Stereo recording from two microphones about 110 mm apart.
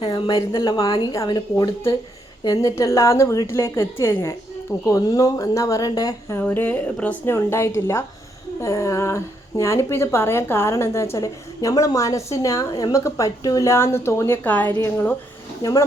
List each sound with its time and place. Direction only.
0.0 s a woman's voice: 45° left (ahead or behind)
6.5 s a woman's voice: 20° left (ahead or behind)
7.3 s a woman's voice: 25° left (ahead or behind)
15.6 s speech: 35° left (ahead or behind)